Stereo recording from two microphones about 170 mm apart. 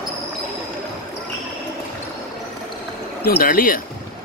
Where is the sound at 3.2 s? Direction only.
60° left (ahead or behind).